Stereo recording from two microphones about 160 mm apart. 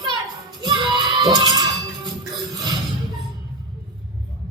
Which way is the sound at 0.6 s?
30° right (ahead or behind).